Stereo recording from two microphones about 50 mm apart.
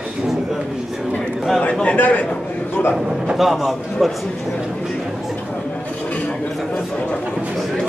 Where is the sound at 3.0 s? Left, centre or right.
Centre.